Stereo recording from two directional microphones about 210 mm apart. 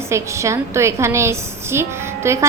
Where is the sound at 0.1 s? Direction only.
15° right (ahead or behind).